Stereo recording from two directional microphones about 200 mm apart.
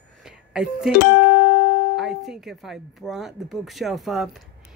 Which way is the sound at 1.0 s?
65° left (ahead or behind).